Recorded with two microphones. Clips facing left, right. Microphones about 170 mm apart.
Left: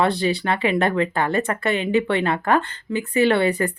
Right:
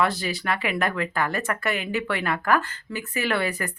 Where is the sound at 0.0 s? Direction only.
30° left (ahead or behind).